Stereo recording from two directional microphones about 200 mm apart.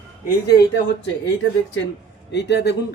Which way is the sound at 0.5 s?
55° left (ahead or behind).